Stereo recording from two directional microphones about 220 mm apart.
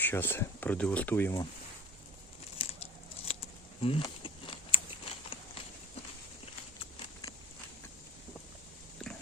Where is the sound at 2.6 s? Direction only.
25° left (ahead or behind).